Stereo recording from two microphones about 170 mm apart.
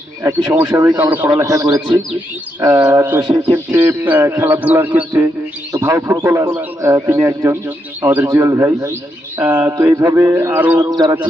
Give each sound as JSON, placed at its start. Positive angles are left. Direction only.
{"t": 0.2, "sound": "a man's voice", "side_deg": -15}
{"t": 0.9, "sound": "a man's voice", "side_deg": -10}
{"t": 3.2, "sound": "a man's voice", "side_deg": -25}
{"t": 10.8, "sound": "a man's voice", "side_deg": -25}